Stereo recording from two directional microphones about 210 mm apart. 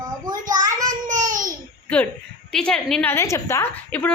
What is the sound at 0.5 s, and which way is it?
Speech, 15° right (ahead or behind).